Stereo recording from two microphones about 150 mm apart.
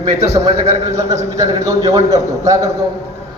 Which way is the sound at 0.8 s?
20° right (ahead or behind).